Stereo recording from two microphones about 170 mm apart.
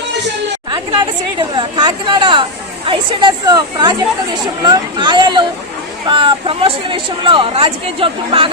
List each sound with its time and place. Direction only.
0.7 s speech: 25° right (ahead or behind)